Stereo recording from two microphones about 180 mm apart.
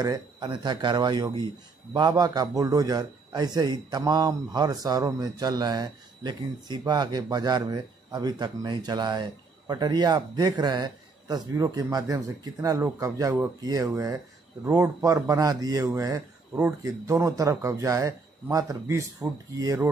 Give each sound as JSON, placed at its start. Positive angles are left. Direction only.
{"t": 0.0, "sound": "a man's voice", "side_deg": -20}